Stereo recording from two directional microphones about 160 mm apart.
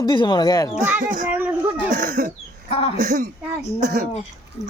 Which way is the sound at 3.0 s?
55° right (ahead or behind).